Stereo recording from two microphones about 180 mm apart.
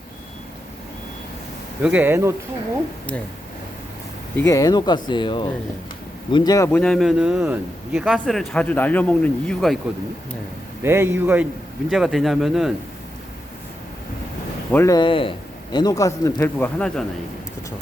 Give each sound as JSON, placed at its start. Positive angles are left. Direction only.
{"t": 1.8, "sound": "a man's voice", "side_deg": -10}
{"t": 4.4, "sound": "a man's voice", "side_deg": 20}
{"t": 10.8, "sound": "a man's voice", "side_deg": -10}
{"t": 14.7, "sound": "speech", "side_deg": 10}
{"t": 14.9, "sound": "a man's voice", "side_deg": 30}